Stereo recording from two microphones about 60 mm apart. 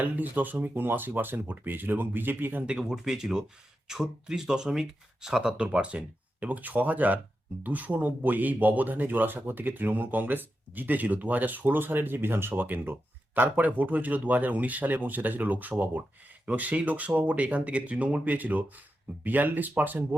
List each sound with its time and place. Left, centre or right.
0.0 s speech: right
2.6 s speech: centre; by 20.1 s right